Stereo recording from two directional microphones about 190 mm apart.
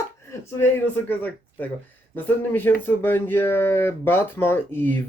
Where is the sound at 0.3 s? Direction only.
15° left (ahead or behind).